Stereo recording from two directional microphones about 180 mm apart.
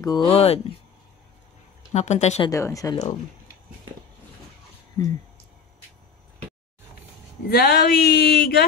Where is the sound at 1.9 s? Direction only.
40° left (ahead or behind).